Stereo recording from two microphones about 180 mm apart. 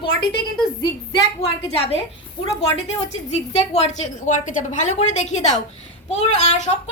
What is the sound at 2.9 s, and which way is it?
A woman's voice, 35° left (ahead or behind).